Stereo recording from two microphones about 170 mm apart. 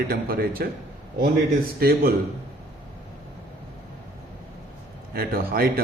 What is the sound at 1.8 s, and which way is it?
Speech, 65° right (ahead or behind).